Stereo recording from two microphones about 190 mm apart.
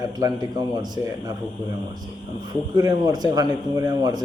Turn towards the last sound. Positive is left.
turn(degrees=-20)  # may be behind; listen again after turning